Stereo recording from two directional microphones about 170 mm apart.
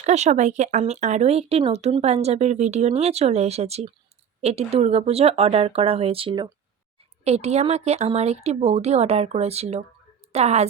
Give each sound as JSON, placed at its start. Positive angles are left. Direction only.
{"t": 0.0, "sound": "speech", "side_deg": -45}